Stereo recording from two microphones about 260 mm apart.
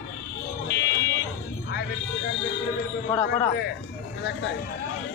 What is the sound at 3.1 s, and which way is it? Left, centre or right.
Speech, centre.